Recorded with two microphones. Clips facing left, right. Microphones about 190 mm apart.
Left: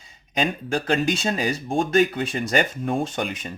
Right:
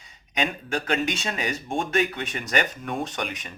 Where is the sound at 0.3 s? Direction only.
30° left (ahead or behind).